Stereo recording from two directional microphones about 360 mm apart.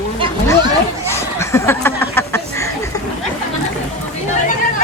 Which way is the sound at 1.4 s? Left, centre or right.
Centre.